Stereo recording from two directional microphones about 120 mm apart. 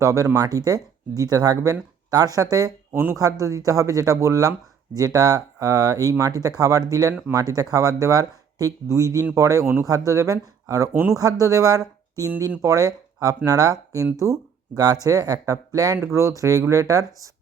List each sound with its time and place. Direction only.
0.0 s speech: 25° right (ahead or behind)
7.1 s speech: 15° right (ahead or behind)
7.3 s speech: 30° right (ahead or behind)